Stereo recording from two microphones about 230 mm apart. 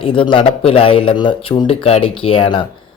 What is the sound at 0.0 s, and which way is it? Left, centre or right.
Speech, left.